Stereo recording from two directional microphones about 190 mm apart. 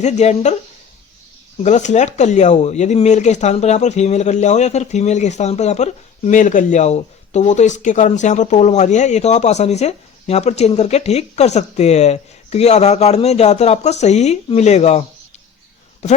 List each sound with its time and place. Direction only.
0.0 s speech: 35° left (ahead or behind)
1.6 s speech: 40° left (ahead or behind)
16.0 s speech: 35° left (ahead or behind)